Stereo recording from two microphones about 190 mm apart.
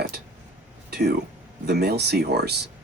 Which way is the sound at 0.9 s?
60° right (ahead or behind).